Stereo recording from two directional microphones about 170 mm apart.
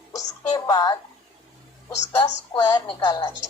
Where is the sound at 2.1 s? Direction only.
20° left (ahead or behind).